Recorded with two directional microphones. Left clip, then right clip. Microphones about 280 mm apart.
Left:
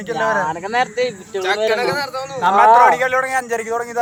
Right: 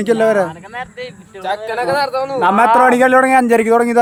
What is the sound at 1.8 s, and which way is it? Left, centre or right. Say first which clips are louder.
Speech: right 5 dB; right.